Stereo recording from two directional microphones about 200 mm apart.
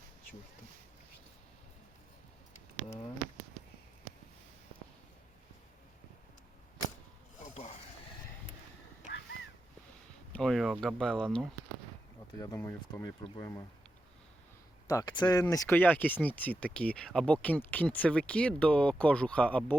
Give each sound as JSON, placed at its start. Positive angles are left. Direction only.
{"t": 7.3, "sound": "snort", "side_deg": 35}
{"t": 10.3, "sound": "speech", "side_deg": 0}
{"t": 12.4, "sound": "speech", "side_deg": 15}
{"t": 14.8, "sound": "speech", "side_deg": 20}